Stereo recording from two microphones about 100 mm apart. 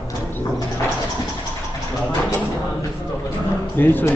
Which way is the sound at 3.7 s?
20° left (ahead or behind).